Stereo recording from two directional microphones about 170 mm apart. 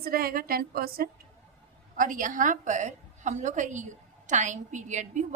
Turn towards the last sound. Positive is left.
turn(degrees=-45)  # may be behind; listen again after turning